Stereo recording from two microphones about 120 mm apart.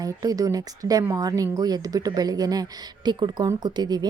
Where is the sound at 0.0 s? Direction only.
30° right (ahead or behind).